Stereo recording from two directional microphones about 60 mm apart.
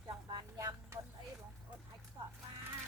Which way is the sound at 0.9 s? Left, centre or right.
Right.